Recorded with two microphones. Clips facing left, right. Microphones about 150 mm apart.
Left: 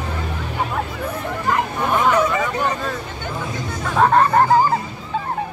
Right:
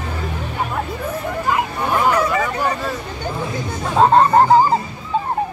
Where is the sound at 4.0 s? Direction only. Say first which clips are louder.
Right 3 dB; 25° right (ahead or behind).